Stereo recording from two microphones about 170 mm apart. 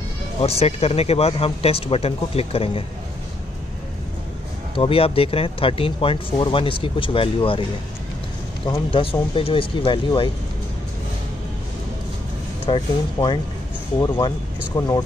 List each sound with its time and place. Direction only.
0.4 s speech: 35° left (ahead or behind)
4.7 s speech: 35° left (ahead or behind)
8.6 s speech: 30° left (ahead or behind)
12.6 s speech: 30° left (ahead or behind)